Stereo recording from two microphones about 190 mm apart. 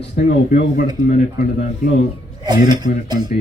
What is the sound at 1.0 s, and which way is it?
Speech, 45° left (ahead or behind).